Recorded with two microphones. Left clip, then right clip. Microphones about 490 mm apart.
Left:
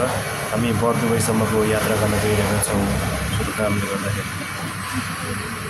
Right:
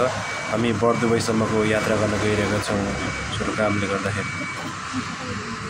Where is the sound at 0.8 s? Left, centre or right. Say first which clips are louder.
Even; left.